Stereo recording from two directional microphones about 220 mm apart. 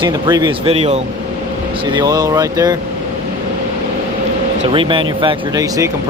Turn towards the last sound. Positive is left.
turn(degrees=-15)  # may be behind; listen again after turning